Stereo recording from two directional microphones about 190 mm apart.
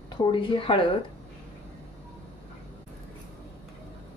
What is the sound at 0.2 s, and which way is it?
Speech, 25° left (ahead or behind).